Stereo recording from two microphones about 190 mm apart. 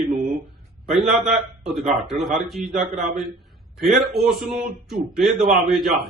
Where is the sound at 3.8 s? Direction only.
Centre (ahead or behind).